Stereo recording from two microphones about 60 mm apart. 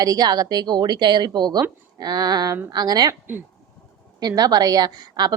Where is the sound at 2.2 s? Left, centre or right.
Right.